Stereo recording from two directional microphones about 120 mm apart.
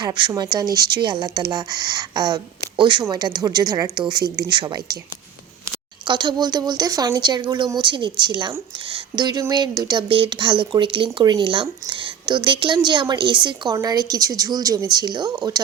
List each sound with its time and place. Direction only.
0.0 s speech: 40° right (ahead or behind)
6.1 s speech: 40° right (ahead or behind)